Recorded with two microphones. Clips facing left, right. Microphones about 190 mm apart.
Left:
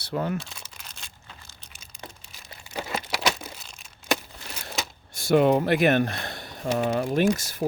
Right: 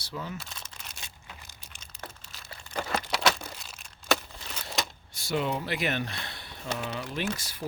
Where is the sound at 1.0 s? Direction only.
15° right (ahead or behind).